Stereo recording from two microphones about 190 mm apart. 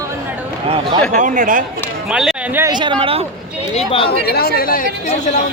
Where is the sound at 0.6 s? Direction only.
30° right (ahead or behind).